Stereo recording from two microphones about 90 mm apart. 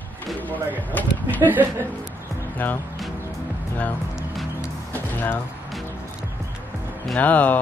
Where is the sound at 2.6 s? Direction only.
20° left (ahead or behind).